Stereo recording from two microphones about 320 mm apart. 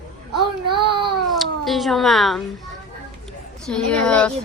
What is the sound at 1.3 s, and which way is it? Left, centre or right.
Cat, centre.